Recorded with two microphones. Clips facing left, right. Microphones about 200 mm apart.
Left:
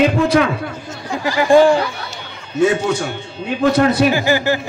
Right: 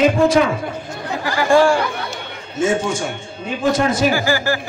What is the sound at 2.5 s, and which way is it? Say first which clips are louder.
A man's voice: left 3 dB; 65° left (ahead or behind).